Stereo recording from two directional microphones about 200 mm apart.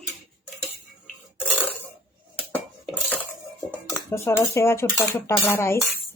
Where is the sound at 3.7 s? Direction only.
10° left (ahead or behind).